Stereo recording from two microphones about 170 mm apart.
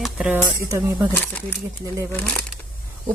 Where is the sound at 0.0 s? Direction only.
5° right (ahead or behind).